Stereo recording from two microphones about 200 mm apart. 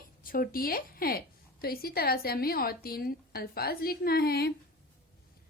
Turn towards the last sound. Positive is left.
turn(degrees=50)  # may be behind; listen again after turning